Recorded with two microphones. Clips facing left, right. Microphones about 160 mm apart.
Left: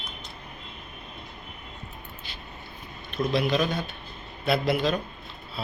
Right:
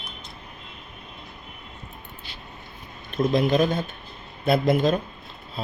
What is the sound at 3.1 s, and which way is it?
Speech, 45° right (ahead or behind).